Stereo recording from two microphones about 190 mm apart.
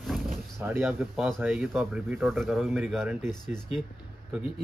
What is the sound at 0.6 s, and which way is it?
Speech, 10° right (ahead or behind).